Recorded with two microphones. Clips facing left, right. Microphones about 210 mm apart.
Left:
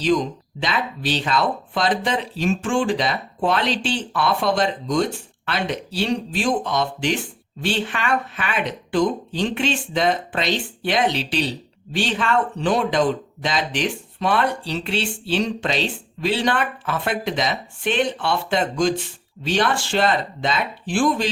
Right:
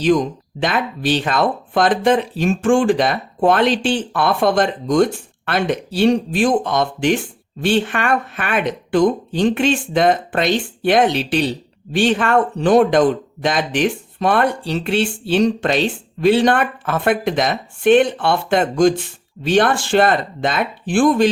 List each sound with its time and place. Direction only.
0.6 s speech: 50° right (ahead or behind)